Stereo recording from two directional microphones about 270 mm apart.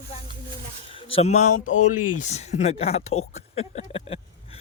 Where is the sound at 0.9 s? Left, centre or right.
Centre.